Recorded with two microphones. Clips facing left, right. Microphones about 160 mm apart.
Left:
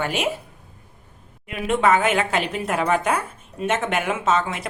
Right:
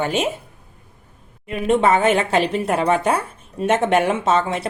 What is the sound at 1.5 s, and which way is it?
A woman's voice, 30° right (ahead or behind).